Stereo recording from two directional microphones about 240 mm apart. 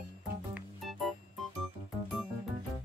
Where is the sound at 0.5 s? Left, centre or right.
Centre.